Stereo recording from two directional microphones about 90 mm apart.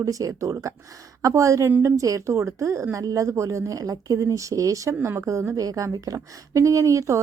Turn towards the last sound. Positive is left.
turn(degrees=-35)  # may be behind; listen again after turning